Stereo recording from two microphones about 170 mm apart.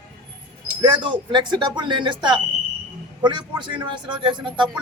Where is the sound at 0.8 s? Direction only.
30° right (ahead or behind).